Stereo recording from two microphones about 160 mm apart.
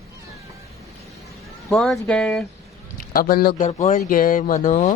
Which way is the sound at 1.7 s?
5° left (ahead or behind).